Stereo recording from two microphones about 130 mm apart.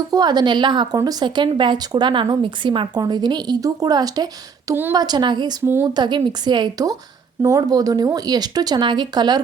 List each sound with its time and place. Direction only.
0.1 s speech: 30° right (ahead or behind)
4.7 s a woman's voice: 20° right (ahead or behind)
4.9 s speech: 30° right (ahead or behind)
5.6 s a woman's voice: 20° right (ahead or behind)
6.0 s speech: 35° right (ahead or behind)